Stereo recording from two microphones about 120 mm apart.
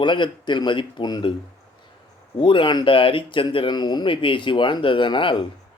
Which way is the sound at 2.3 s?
45° left (ahead or behind).